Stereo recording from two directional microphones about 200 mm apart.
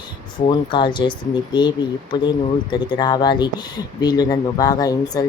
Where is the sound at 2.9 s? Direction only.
20° left (ahead or behind).